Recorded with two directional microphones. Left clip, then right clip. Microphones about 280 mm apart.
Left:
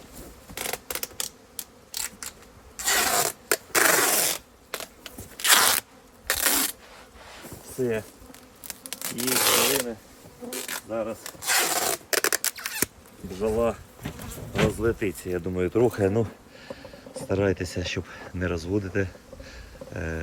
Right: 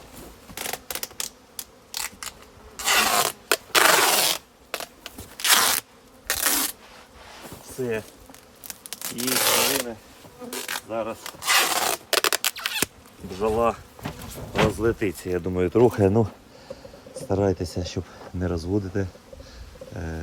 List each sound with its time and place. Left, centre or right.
0.5 s a sound: centre
2.9 s zipper: centre
4.7 s a sound: centre
8.6 s rub: centre
10.5 s speech: centre
11.4 s scissors: centre
13.5 s speech: right
17.2 s speech: centre